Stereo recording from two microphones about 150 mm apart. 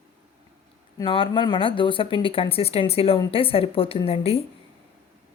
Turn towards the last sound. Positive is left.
turn(degrees=40)  # may be behind; listen again after turning